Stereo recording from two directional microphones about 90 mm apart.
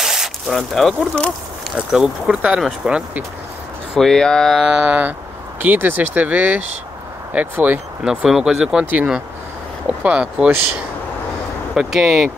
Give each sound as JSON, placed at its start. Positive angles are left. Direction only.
{"t": 0.0, "sound": "a sound", "side_deg": -5}
{"t": 1.8, "sound": "speech", "side_deg": -5}
{"t": 3.9, "sound": "speech", "side_deg": 5}
{"t": 4.6, "sound": "speech", "side_deg": -10}
{"t": 8.0, "sound": "speech", "side_deg": -10}
{"t": 11.7, "sound": "speech", "side_deg": -5}